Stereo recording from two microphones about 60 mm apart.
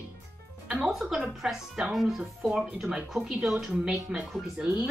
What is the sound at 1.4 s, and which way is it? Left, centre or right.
A woman's voice, centre.